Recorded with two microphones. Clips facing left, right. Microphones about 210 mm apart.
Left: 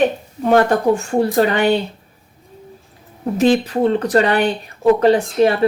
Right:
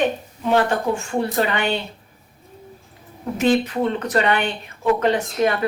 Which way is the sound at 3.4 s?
35° left (ahead or behind).